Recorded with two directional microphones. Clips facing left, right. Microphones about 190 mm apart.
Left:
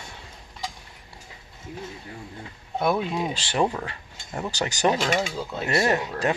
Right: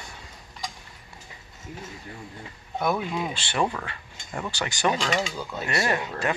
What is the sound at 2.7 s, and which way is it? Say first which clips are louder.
Speech: left 2 dB; 30° left (ahead or behind).